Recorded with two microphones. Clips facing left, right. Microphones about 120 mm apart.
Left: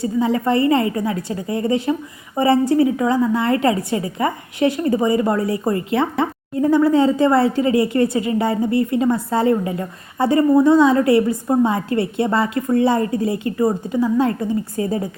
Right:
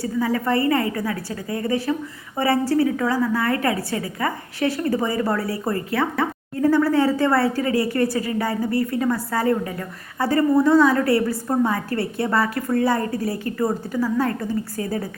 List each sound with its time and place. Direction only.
0.0 s a woman's voice: 25° left (ahead or behind)